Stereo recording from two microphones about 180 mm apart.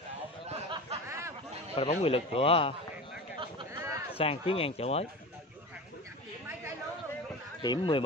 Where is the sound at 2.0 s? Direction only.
30° left (ahead or behind).